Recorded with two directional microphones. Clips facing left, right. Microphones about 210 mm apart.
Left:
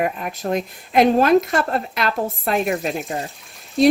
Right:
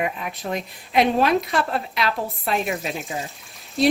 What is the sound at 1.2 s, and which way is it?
Speech, centre (ahead or behind).